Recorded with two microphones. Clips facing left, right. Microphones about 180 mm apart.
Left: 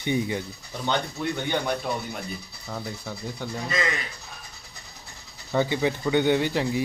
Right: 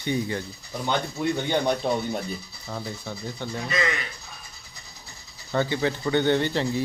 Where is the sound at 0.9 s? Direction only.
20° right (ahead or behind).